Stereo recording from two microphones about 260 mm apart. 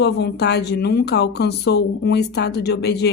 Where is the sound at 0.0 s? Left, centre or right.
Left.